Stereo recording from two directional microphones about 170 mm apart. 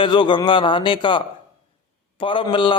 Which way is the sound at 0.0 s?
30° left (ahead or behind).